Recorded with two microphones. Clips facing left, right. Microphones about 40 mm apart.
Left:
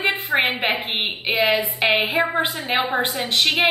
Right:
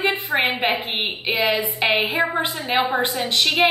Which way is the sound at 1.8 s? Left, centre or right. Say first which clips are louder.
Left 1 dB; left.